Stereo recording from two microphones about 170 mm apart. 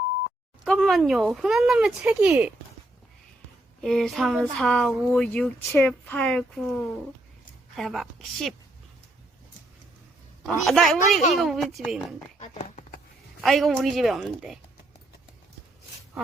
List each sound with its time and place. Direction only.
0.6 s speech: centre (ahead or behind)
3.8 s speech: centre (ahead or behind)
7.8 s speech: centre (ahead or behind)
10.4 s speech: centre (ahead or behind)
12.4 s clip-clop: 40° left (ahead or behind)
13.4 s speech: centre (ahead or behind)